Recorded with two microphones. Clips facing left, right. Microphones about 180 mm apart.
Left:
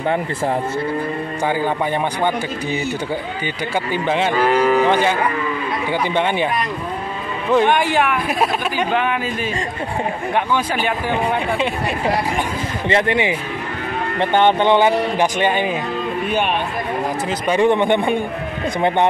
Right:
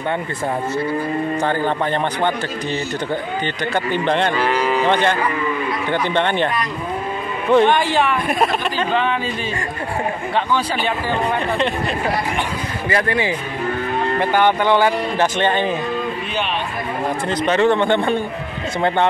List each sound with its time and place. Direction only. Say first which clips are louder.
1.4 s speech: left 3 dB; 10° left (ahead or behind)
3.7 s speech: right 1 dB; 10° left (ahead or behind)
4.4 s cattle: left 3 dB; 45° left (ahead or behind)
4.8 s speech: left 1 dB; 10° left (ahead or behind)
10.5 s speech: even; 10° left (ahead or behind)
12.8 s speech: left 2 dB; 25° left (ahead or behind)
17.3 s speech: even; 10° left (ahead or behind)